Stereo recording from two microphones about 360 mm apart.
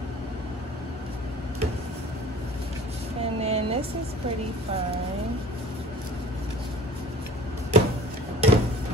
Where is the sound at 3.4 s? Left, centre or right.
Centre.